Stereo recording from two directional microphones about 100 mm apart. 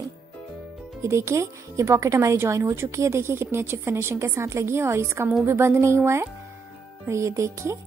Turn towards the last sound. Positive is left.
turn(degrees=-30)  # may be behind; listen again after turning